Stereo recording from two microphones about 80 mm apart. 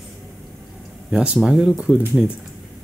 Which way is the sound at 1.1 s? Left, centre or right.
Centre.